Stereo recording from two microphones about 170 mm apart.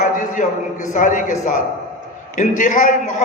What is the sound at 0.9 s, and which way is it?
A man's voice, 50° left (ahead or behind).